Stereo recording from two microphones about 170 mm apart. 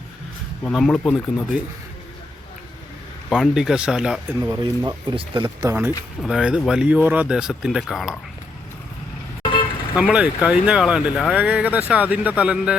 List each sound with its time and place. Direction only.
0.6 s speech: 5° left (ahead or behind)
3.2 s speech: centre (ahead or behind)
4.4 s speech: 20° right (ahead or behind)
6.2 s speech: 5° right (ahead or behind)
9.9 s speech: 5° right (ahead or behind)